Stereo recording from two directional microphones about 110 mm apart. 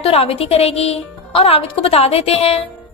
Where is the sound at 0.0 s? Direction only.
60° left (ahead or behind).